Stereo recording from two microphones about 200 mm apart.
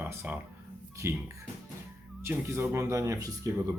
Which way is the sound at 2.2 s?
10° right (ahead or behind).